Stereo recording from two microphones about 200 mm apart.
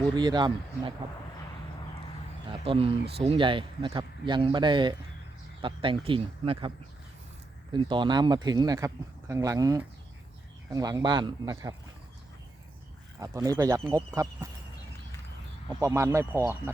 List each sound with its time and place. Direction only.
0.2 s speech: 20° right (ahead or behind)
2.5 s speech: 30° right (ahead or behind)
7.7 s speech: 25° right (ahead or behind)
13.1 s speech: 15° right (ahead or behind)
15.8 s speech: 15° right (ahead or behind)